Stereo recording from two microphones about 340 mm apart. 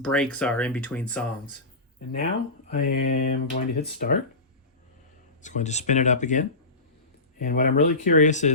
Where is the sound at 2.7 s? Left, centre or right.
Left.